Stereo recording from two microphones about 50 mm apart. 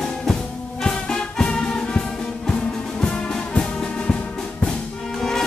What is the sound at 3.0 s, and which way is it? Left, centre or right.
Music, centre.